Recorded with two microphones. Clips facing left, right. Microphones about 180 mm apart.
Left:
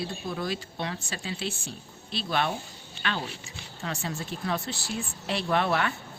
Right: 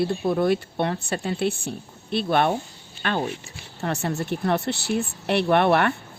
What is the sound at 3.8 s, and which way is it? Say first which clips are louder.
A woman's voice: right 8 dB; 65° right (ahead or behind).